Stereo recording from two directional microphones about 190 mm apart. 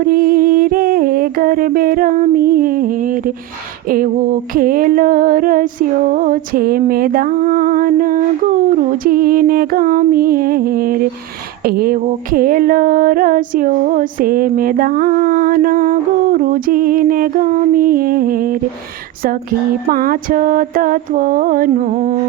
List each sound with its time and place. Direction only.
0.0 s music: 50° right (ahead or behind)
19.9 s music: 50° right (ahead or behind)